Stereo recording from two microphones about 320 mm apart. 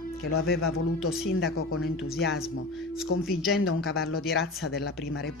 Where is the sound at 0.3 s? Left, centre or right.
Left.